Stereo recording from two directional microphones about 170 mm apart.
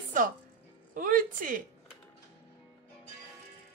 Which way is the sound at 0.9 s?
55° right (ahead or behind).